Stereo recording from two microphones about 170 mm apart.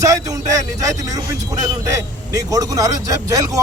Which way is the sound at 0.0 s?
20° right (ahead or behind).